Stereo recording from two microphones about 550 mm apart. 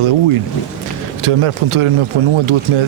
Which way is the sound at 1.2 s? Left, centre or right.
Right.